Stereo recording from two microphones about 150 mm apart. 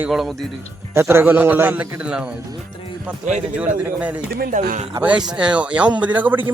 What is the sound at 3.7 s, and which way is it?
Speech, 10° right (ahead or behind).